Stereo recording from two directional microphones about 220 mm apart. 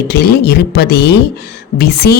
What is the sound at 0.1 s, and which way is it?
Speech, 45° left (ahead or behind).